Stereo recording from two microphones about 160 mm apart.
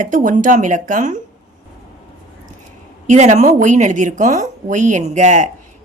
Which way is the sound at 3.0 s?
50° right (ahead or behind).